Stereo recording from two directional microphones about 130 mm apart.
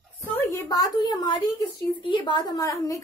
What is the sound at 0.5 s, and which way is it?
A woman's voice, 25° left (ahead or behind).